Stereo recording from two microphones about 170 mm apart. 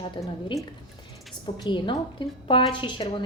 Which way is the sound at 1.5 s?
30° left (ahead or behind).